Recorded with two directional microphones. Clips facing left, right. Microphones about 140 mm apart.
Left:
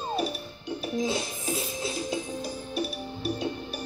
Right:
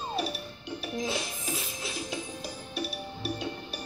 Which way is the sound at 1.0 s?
30° left (ahead or behind).